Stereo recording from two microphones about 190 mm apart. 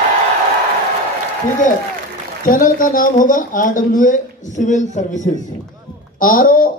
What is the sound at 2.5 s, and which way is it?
Speech, 45° left (ahead or behind).